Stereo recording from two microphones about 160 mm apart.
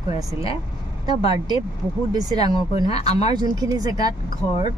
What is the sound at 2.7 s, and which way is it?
Speech, 40° left (ahead or behind).